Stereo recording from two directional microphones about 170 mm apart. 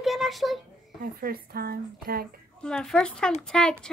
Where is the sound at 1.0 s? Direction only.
60° right (ahead or behind).